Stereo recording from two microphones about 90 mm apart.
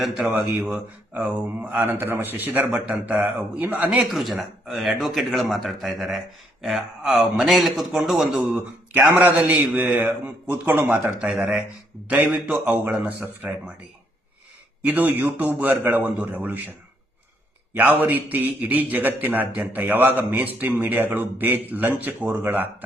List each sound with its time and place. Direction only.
0.0 s speech: 5° right (ahead or behind)
1.1 s a man's voice: 20° right (ahead or behind)
4.0 s a man's voice: centre (ahead or behind); by 13.5 s 20° right (ahead or behind)
14.8 s a man's voice: 15° right (ahead or behind)
17.7 s a man's voice: 20° right (ahead or behind)